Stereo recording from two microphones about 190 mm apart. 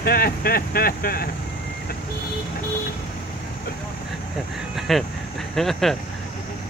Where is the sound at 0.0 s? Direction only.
55° left (ahead or behind).